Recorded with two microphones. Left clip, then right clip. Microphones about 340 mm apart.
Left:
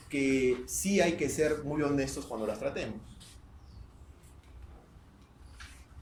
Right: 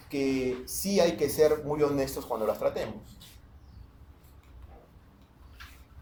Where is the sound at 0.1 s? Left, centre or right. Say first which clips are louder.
Left 1 dB; centre.